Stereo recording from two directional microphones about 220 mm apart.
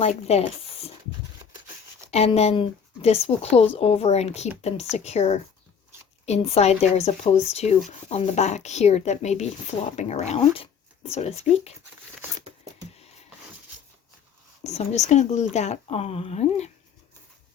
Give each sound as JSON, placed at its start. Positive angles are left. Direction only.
{"t": 0.0, "sound": "speech", "side_deg": 30}
{"t": 2.0, "sound": "speech", "side_deg": 30}
{"t": 14.6, "sound": "speech", "side_deg": 30}